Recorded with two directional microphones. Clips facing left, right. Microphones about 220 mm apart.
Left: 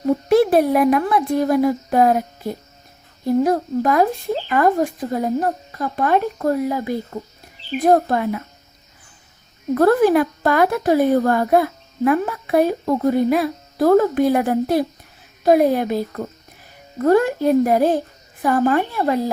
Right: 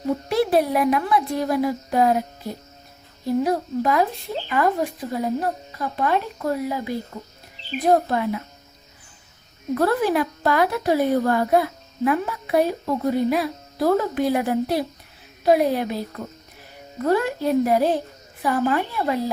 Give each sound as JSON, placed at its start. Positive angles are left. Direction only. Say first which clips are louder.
{"t": 0.3, "sound": "speech", "louder": "left 6 dB", "side_deg": 50}
{"t": 9.7, "sound": "speech", "louder": "left 6 dB", "side_deg": 50}